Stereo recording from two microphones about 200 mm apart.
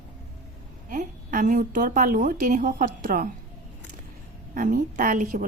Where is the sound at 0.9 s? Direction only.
40° right (ahead or behind).